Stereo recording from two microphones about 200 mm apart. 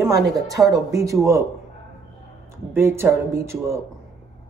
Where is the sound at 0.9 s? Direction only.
15° right (ahead or behind).